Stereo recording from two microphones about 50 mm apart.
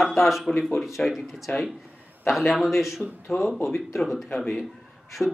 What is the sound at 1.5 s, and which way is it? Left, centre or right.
Speech, left.